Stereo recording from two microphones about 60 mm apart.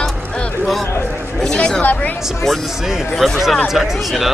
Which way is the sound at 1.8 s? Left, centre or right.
Left.